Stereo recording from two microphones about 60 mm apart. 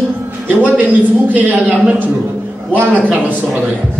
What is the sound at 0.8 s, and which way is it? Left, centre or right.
A man's voice, right.